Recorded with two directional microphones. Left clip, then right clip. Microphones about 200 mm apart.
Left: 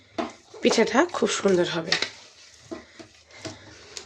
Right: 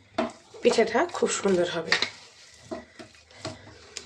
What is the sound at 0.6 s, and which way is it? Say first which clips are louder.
Speech: left 1 dB; 40° left (ahead or behind).